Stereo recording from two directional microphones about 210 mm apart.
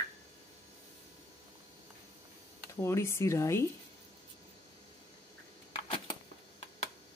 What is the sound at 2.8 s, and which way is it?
Speech, 10° left (ahead or behind).